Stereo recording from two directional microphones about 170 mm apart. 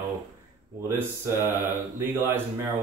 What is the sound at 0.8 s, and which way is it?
Speech, 15° right (ahead or behind).